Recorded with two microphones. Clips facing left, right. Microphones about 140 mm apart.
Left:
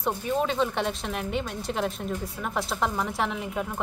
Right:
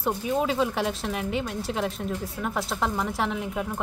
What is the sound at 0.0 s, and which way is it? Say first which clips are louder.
Speech: right 1 dB; 5° right (ahead or behind).